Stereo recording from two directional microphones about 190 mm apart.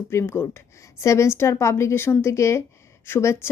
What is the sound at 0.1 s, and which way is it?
A woman's voice, 15° left (ahead or behind).